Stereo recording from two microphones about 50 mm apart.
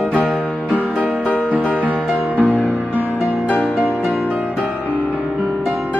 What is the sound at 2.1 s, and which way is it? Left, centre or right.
Music, left.